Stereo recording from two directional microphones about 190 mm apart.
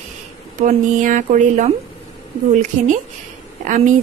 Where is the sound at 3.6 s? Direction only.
40° right (ahead or behind).